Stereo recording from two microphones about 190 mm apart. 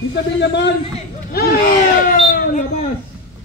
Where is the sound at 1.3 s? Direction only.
55° left (ahead or behind).